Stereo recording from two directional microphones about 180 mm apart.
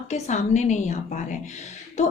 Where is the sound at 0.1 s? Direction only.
40° left (ahead or behind).